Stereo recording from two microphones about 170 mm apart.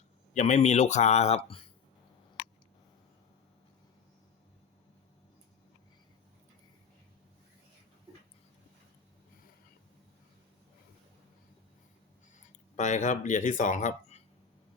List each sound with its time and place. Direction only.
0.3 s speech: 45° left (ahead or behind)
12.7 s speech: 45° left (ahead or behind)